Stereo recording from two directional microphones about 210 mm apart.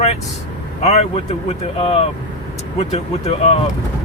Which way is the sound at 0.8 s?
30° left (ahead or behind).